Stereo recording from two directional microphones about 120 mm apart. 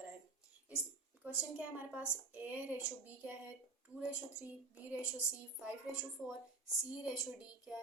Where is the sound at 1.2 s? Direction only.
10° right (ahead or behind).